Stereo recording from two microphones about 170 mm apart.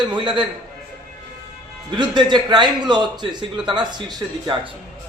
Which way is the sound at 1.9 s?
25° right (ahead or behind).